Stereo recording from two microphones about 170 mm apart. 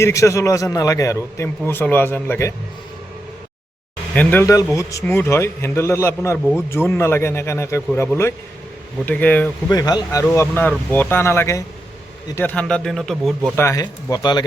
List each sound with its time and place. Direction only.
0.0 s a man's voice: 15° left (ahead or behind)
4.1 s a man's voice: 10° left (ahead or behind)
9.6 s a man's voice: 25° left (ahead or behind); by 13.5 s centre (ahead or behind)
13.6 s speech: 20° left (ahead or behind)